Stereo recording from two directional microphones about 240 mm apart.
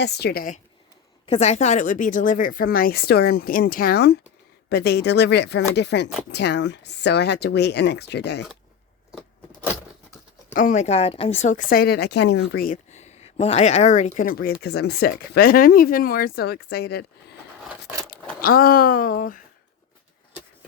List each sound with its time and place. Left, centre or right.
0.0 s speech: left
10.5 s speech: left
18.4 s speech: left